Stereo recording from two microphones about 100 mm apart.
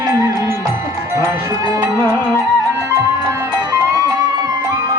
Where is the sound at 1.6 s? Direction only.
45° right (ahead or behind).